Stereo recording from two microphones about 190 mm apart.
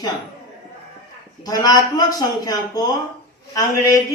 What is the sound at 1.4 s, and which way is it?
Speech, 20° left (ahead or behind).